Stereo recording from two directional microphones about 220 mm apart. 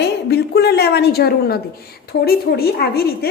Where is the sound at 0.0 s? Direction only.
50° left (ahead or behind).